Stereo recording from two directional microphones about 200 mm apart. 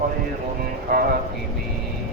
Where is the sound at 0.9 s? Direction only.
45° right (ahead or behind).